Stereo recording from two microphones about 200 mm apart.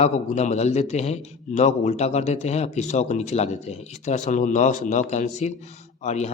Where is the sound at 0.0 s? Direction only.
35° left (ahead or behind).